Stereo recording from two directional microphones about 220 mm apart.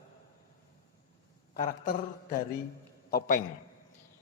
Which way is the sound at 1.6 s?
35° left (ahead or behind).